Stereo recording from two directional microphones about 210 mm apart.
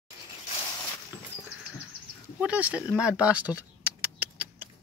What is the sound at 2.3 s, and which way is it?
Speech, 5° right (ahead or behind).